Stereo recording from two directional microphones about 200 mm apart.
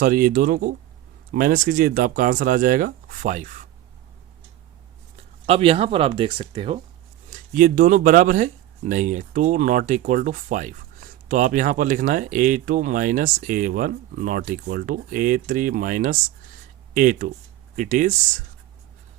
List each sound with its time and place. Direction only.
0.0 s speech: 45° right (ahead or behind)
5.1 s speech: 30° right (ahead or behind)
7.3 s speech: 40° right (ahead or behind)